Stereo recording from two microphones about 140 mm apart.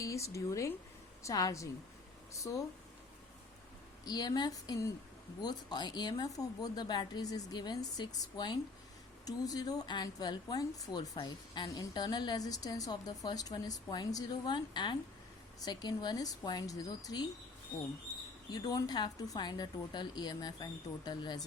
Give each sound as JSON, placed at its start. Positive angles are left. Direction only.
{"t": 0.0, "sound": "a woman's voice", "side_deg": 20}
{"t": 4.0, "sound": "a woman's voice", "side_deg": 30}
{"t": 18.5, "sound": "a woman's voice", "side_deg": 30}